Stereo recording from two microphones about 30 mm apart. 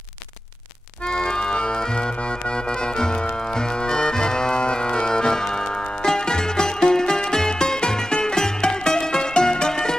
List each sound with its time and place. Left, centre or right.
1.0 s accordion: left
5.4 s music: centre